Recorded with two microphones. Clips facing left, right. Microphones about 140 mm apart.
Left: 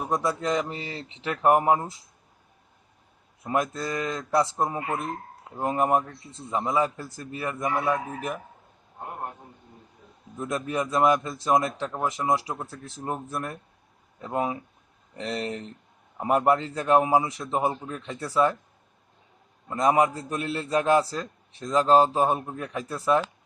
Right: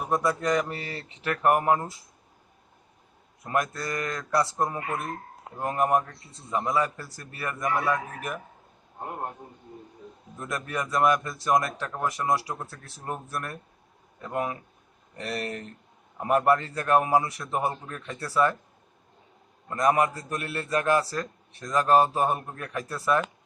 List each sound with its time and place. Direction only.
0.2 s a man's voice: 20° left (ahead or behind)
3.5 s a man's voice: 20° left (ahead or behind)
10.4 s a man's voice: 20° left (ahead or behind)
13.1 s a man's voice: 20° left (ahead or behind)
19.7 s a man's voice: 20° left (ahead or behind)